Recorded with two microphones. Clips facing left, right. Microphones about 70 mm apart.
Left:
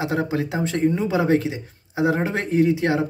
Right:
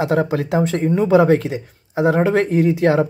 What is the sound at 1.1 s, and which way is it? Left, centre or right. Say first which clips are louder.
Speech: right 6 dB; right.